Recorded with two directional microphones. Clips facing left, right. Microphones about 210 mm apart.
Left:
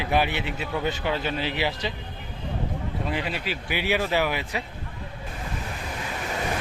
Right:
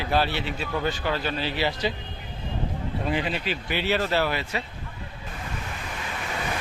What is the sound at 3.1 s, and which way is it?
Speech, 10° left (ahead or behind).